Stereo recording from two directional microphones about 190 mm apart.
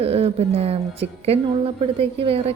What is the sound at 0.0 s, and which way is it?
A woman's voice, 30° right (ahead or behind).